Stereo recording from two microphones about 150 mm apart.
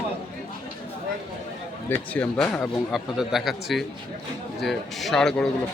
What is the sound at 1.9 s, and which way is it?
Speech, 10° left (ahead or behind).